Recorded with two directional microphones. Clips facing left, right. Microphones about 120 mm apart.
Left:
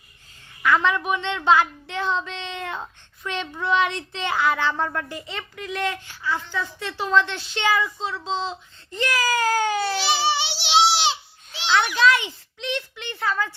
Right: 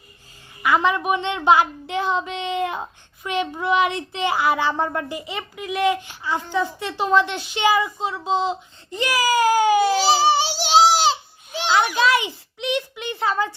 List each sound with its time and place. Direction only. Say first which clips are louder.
0.6 s speech: right 2 dB; 15° right (ahead or behind)
9.9 s a sound: right 6 dB; 40° right (ahead or behind)
11.9 s a child's voice: even; 10° right (ahead or behind)